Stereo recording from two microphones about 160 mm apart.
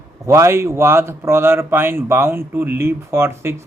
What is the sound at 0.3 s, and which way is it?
A man's voice, 15° right (ahead or behind).